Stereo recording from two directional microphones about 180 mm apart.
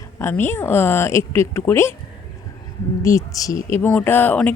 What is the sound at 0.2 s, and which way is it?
Speech, 15° left (ahead or behind).